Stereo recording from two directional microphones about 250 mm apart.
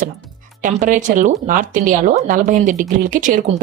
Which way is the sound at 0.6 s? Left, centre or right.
Right.